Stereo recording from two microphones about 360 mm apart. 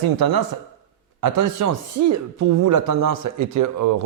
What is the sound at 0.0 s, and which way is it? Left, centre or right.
Speech, right.